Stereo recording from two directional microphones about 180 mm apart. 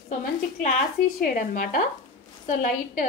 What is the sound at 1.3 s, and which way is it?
A woman's voice, 50° left (ahead or behind).